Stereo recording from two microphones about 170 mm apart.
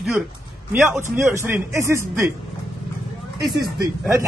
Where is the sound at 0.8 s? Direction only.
15° right (ahead or behind).